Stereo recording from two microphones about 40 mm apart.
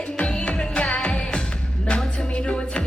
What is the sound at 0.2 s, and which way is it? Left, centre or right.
Music, left.